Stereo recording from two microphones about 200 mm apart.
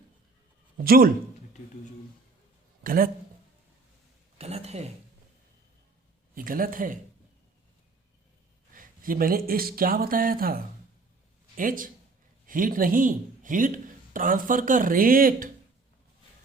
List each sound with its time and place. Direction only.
0.9 s speech: 45° right (ahead or behind)
2.8 s speech: 45° right (ahead or behind)
4.4 s a sound: 30° right (ahead or behind)
6.3 s speech: 45° right (ahead or behind)
8.7 s speech: 45° right (ahead or behind)